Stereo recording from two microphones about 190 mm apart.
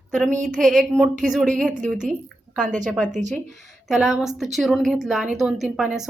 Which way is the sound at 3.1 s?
40° right (ahead or behind).